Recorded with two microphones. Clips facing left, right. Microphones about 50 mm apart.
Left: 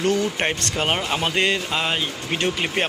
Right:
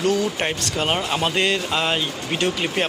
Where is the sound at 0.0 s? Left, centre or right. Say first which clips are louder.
Even; left; by 2.4 s centre.